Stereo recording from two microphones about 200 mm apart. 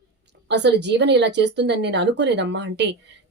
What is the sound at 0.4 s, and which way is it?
A woman's voice, 60° right (ahead or behind).